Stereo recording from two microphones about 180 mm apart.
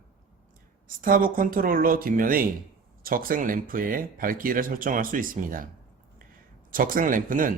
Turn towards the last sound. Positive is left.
turn(degrees=-50)  # may be behind; listen again after turning